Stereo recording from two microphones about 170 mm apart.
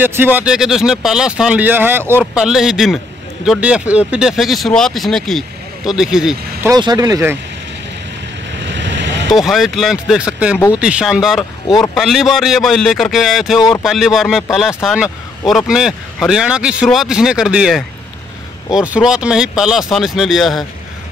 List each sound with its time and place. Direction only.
0.0 s speech: 10° right (ahead or behind)
6.6 s speech: 25° right (ahead or behind)
8.7 s vehicle: 90° right
9.3 s speech: centre (ahead or behind)
11.6 s speech: 25° left (ahead or behind)
11.9 s speech: centre (ahead or behind)